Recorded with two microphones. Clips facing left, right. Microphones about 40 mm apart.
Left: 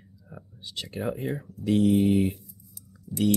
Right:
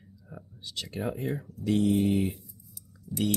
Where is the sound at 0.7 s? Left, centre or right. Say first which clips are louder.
Left 1 dB; centre.